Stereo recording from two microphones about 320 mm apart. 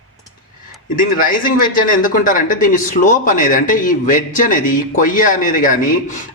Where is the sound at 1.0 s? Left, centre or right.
Left.